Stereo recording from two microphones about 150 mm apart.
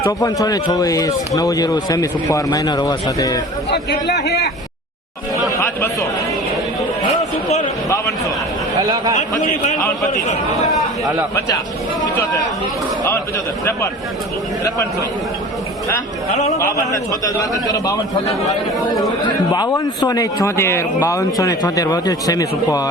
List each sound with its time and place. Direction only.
0.2 s a man's voice: 25° left (ahead or behind)
4.1 s a man's voice: 90° left
5.5 s speech: 20° left (ahead or behind)
7.9 s a man's voice: 20° left (ahead or behind)
8.8 s speech: 25° right (ahead or behind)
11.3 s a man's voice: 25° left (ahead or behind)
16.6 s a man's voice: 20° left (ahead or behind)